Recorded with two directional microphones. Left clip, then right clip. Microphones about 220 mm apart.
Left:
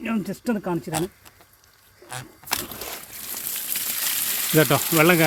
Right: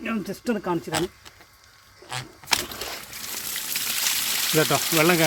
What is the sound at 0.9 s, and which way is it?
Speech, 10° left (ahead or behind).